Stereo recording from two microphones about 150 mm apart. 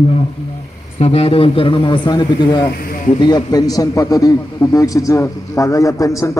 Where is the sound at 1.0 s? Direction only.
45° left (ahead or behind).